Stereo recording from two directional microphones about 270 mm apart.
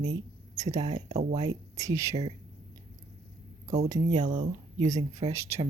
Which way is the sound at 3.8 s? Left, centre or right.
Centre.